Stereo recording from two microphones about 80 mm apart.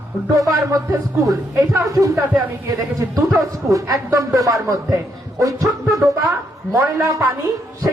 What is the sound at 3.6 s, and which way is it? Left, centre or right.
Speech, right.